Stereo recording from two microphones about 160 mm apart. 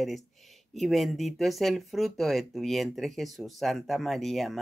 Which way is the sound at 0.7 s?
Centre (ahead or behind).